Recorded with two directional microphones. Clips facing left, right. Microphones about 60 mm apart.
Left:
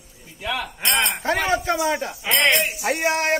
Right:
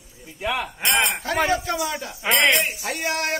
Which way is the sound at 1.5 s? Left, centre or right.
Left.